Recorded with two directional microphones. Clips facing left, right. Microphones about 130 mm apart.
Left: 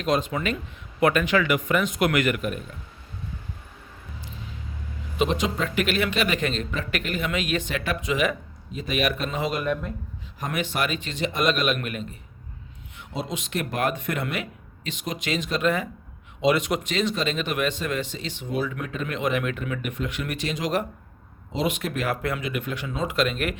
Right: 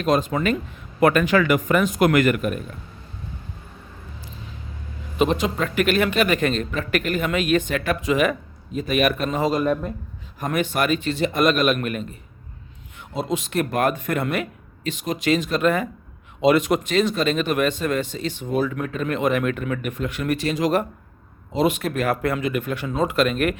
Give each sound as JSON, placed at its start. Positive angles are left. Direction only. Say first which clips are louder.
{"t": 0.0, "sound": "a man's voice", "louder": "right 4 dB", "side_deg": -45}
{"t": 5.1, "sound": "a man's voice", "louder": "right 3 dB", "side_deg": -45}
{"t": 10.5, "sound": "a man's voice", "louder": "right 6 dB", "side_deg": -45}